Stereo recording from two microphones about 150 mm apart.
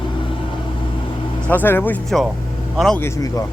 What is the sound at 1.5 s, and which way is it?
Speech, 15° left (ahead or behind).